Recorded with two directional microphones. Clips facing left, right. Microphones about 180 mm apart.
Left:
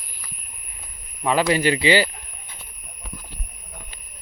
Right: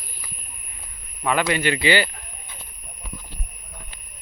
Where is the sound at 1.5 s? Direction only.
35° left (ahead or behind).